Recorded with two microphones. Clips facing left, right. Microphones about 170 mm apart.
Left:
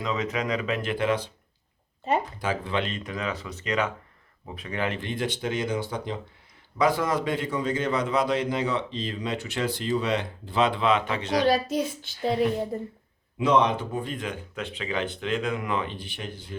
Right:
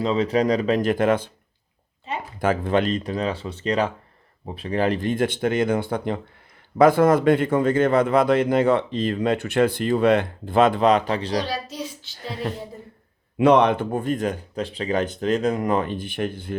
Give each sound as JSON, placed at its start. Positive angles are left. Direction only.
{"t": 0.0, "sound": "speech", "side_deg": -30}
{"t": 2.1, "sound": "a sound", "side_deg": 40}
{"t": 2.4, "sound": "speech", "side_deg": -50}
{"t": 11.4, "sound": "child singing", "side_deg": 55}
{"t": 13.4, "sound": "speech", "side_deg": -60}